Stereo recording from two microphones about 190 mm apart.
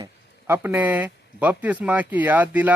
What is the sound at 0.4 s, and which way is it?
Speech, 10° right (ahead or behind).